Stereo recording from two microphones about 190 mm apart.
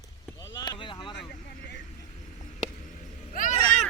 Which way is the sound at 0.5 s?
20° left (ahead or behind).